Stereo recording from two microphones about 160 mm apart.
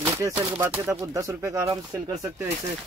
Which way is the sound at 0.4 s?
20° right (ahead or behind).